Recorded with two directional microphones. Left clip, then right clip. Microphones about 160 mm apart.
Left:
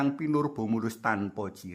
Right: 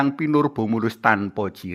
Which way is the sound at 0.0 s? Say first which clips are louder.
Right 8 dB; 30° right (ahead or behind).